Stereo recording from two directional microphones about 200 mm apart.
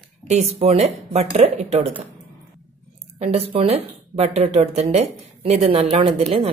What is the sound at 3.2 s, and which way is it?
Speech, 30° right (ahead or behind).